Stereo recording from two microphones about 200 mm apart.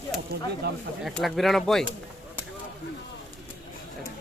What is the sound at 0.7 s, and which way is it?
Speech, 50° right (ahead or behind).